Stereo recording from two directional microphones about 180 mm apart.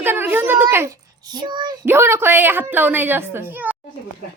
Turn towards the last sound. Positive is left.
turn(degrees=-10)  # may be behind; listen again after turning